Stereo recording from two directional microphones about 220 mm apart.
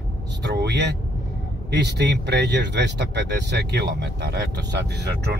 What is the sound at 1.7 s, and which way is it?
A man's voice, 50° right (ahead or behind).